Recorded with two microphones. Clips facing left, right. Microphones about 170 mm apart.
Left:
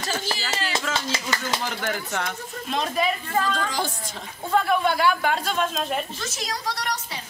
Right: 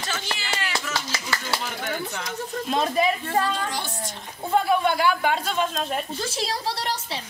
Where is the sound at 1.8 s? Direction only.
75° left (ahead or behind).